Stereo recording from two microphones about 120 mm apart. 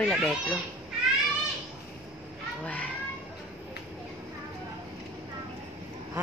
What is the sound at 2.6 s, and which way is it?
Children playing, 10° left (ahead or behind).